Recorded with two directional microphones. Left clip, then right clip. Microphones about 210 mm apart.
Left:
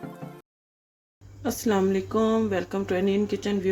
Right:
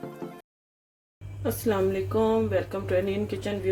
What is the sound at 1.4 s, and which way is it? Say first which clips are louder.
Speech: left 1 dB; 30° left (ahead or behind).